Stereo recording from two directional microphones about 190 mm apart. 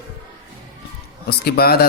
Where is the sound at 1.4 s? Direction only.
55° left (ahead or behind).